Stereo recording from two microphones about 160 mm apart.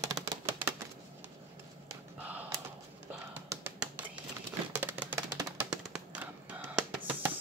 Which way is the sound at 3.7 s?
10° right (ahead or behind).